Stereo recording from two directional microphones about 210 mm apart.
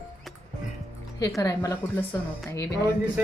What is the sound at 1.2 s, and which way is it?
A woman's voice, 15° left (ahead or behind).